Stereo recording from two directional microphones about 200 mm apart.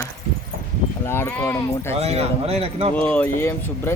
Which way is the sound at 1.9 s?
30° right (ahead or behind).